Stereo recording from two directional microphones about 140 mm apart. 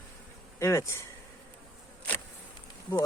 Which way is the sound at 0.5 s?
20° left (ahead or behind).